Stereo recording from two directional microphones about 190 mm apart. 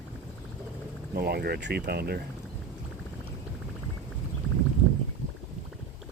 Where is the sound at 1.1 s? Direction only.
55° right (ahead or behind).